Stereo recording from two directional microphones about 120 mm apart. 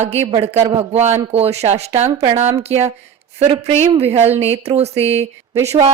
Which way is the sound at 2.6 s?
60° right (ahead or behind).